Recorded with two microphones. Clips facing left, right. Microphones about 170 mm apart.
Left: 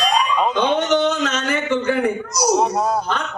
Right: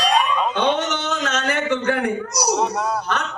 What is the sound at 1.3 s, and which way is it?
A man's voice, 65° right (ahead or behind).